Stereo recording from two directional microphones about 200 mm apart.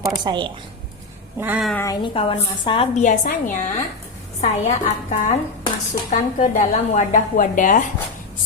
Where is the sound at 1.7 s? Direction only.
15° left (ahead or behind).